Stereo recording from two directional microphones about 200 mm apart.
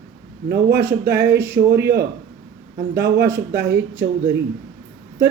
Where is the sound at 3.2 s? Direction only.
10° right (ahead or behind).